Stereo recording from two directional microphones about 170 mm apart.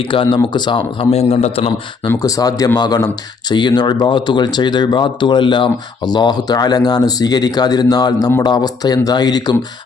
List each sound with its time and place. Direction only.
0.0 s speech: 30° left (ahead or behind)
2.1 s speech: 20° left (ahead or behind)